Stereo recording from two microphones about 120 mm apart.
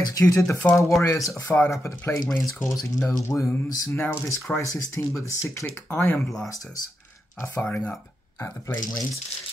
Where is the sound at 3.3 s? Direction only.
15° left (ahead or behind).